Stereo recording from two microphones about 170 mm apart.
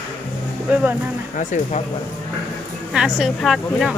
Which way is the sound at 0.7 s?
10° right (ahead or behind).